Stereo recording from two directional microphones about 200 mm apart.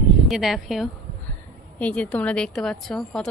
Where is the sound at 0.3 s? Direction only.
Centre (ahead or behind).